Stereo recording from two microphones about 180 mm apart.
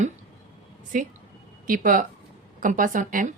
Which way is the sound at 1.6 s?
50° right (ahead or behind).